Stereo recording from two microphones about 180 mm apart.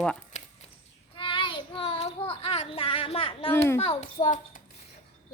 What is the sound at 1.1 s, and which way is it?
Child singing, 30° left (ahead or behind).